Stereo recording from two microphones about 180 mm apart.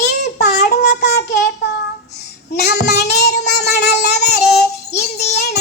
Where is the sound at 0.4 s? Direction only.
65° left (ahead or behind).